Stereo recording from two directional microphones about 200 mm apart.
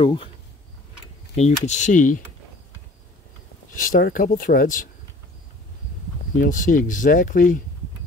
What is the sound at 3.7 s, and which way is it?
Speech, 45° left (ahead or behind).